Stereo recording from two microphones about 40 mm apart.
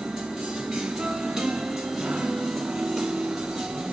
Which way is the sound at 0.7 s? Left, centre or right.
Centre.